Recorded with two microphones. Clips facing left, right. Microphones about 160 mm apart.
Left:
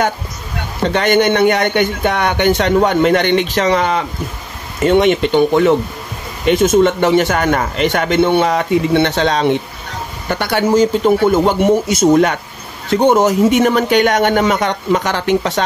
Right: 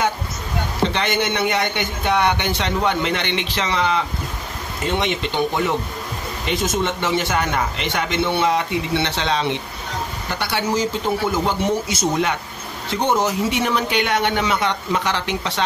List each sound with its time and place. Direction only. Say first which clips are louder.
0.8 s speech: left 10 dB; 50° left (ahead or behind)
6.4 s speech: left 11 dB; 55° left (ahead or behind)